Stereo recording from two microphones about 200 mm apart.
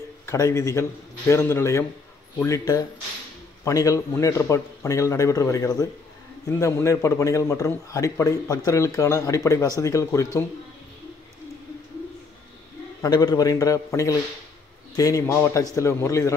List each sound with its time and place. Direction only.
0.3 s a man's voice: 15° left (ahead or behind)
13.0 s a man's voice: 20° left (ahead or behind)